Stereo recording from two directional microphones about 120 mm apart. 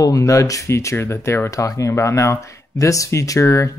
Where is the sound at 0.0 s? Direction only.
25° left (ahead or behind).